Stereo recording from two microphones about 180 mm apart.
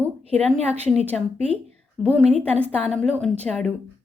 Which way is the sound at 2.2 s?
35° right (ahead or behind).